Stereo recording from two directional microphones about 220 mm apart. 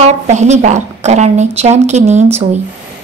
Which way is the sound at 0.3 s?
30° right (ahead or behind).